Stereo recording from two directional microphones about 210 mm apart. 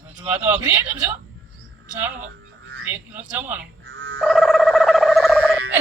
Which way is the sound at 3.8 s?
55° right (ahead or behind).